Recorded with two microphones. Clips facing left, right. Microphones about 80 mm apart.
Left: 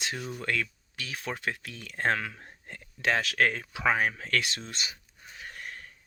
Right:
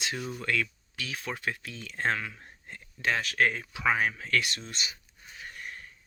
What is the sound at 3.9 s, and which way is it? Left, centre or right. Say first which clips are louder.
Speech: left 1 dB; left.